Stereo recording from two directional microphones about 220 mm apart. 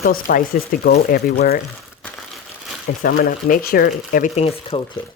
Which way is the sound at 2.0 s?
5° left (ahead or behind).